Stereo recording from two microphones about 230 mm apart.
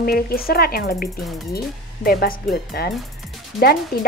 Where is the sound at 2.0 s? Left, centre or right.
Left.